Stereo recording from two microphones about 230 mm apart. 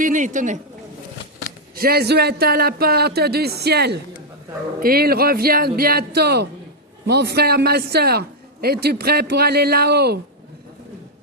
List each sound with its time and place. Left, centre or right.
0.0 s a man's voice: right
1.7 s a man's voice: right